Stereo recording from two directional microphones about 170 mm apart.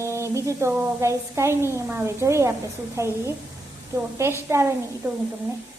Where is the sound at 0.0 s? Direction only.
15° right (ahead or behind).